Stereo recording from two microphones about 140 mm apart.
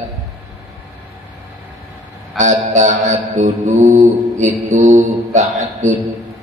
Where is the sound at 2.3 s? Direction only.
60° right (ahead or behind).